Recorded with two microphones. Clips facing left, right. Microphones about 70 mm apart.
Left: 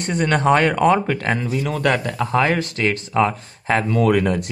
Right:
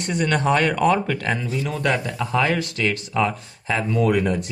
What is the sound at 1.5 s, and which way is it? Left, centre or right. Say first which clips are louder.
Speech: left 3 dB; left.